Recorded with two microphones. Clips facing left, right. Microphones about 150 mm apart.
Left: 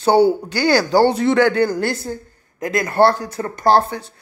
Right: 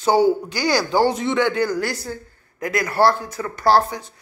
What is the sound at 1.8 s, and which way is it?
A man's voice, 25° left (ahead or behind).